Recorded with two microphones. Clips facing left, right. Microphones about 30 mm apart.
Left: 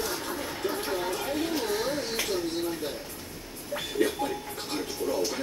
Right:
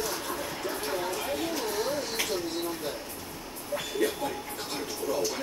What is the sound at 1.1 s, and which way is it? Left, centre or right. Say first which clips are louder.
Chatter: left 1 dB; centre.